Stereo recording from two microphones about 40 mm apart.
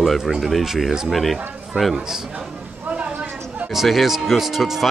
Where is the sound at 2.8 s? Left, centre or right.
Right.